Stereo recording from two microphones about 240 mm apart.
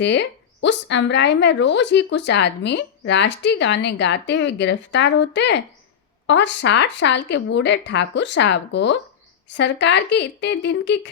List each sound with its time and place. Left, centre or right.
0.0 s speech: left